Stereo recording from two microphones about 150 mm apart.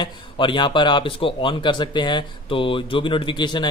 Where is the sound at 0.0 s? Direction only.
30° left (ahead or behind).